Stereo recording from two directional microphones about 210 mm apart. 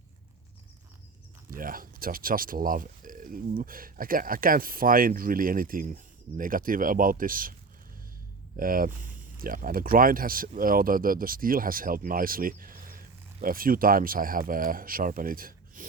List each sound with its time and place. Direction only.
1.5 s speech: 40° right (ahead or behind)
8.5 s speech: 40° right (ahead or behind)